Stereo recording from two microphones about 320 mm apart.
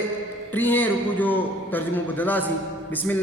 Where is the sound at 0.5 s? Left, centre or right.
Centre.